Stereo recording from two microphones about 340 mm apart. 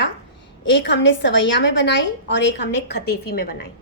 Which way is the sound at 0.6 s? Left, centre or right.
Left.